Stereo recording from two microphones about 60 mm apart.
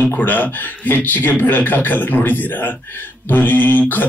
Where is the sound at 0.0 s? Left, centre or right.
Left.